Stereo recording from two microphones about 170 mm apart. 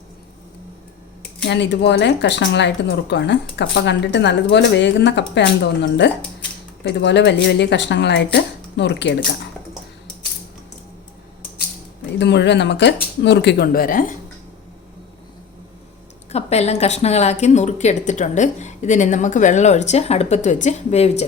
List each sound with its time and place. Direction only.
1.5 s speech: 90° left
12.2 s a woman's voice: 90° left; by 14.2 s 55° left (ahead or behind)
16.3 s speech: 40° left (ahead or behind)